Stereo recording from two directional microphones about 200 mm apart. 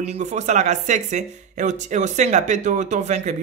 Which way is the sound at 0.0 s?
35° right (ahead or behind).